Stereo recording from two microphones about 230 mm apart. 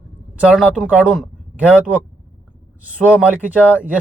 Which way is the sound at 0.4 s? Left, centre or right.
Centre.